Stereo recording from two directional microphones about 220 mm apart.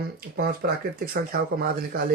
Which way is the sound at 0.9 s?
45° right (ahead or behind).